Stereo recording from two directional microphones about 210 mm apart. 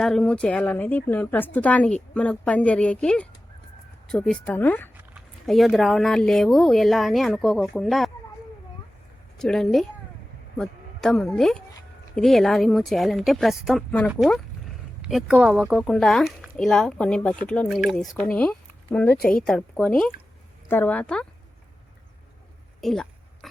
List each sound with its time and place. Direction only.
0.0 s a woman's voice: 5° left (ahead or behind)
9.4 s a woman's voice: centre (ahead or behind)
19.1 s speech: 45° left (ahead or behind)
19.4 s a woman's voice: 5° left (ahead or behind)
22.8 s a sound: centre (ahead or behind)